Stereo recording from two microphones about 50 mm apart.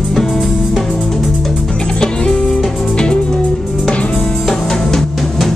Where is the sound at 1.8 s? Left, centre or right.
Centre.